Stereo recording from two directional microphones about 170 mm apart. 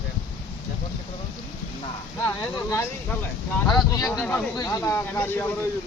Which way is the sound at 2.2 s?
15° left (ahead or behind).